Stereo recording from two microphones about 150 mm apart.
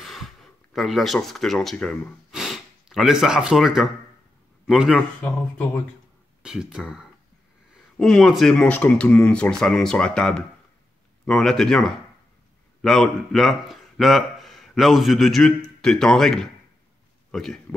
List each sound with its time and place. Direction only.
0.0 s speech: centre (ahead or behind)
5.2 s speech: 10° left (ahead or behind)
6.4 s a man's voice: 5° right (ahead or behind)